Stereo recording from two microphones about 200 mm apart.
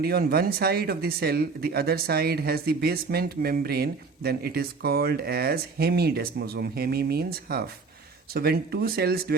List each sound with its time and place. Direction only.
0.0 s speech: 50° right (ahead or behind)